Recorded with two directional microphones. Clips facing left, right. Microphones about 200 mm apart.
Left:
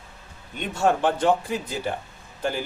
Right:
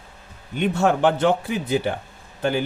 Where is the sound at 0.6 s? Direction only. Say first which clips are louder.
Right 3 dB; 70° right (ahead or behind).